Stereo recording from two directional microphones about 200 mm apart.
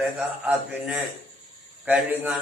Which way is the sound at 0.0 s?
5° right (ahead or behind).